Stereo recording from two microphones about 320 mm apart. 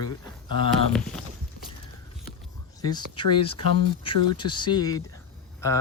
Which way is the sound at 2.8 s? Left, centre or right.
Centre.